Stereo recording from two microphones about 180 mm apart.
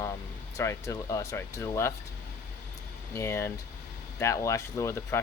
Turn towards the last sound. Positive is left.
turn(degrees=15)  # may be behind; listen again after turning